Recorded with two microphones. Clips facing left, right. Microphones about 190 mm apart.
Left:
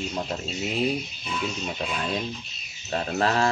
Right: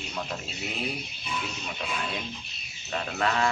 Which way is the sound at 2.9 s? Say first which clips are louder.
Left 4 dB; 35° left (ahead or behind).